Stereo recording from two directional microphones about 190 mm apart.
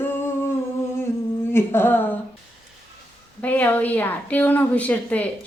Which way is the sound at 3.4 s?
10° left (ahead or behind).